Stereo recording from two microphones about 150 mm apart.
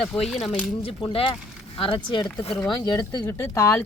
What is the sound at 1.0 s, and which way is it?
Speech, 35° left (ahead or behind).